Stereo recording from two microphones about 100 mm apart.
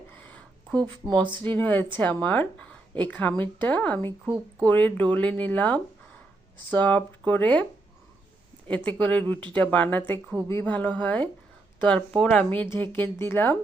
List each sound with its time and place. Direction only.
0.1 s a sound: 15° left (ahead or behind)
1.3 s a woman's voice: 20° left (ahead or behind)
8.6 s a woman's voice: 15° left (ahead or behind)